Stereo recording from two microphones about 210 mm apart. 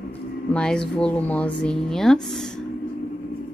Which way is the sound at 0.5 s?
5° left (ahead or behind).